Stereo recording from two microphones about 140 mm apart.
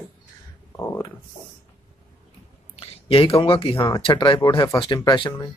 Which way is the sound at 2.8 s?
40° left (ahead or behind).